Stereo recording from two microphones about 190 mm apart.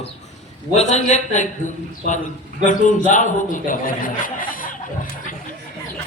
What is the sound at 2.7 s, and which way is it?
A man's voice, 40° left (ahead or behind).